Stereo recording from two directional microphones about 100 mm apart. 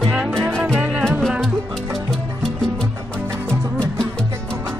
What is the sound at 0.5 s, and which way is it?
Music, 10° left (ahead or behind).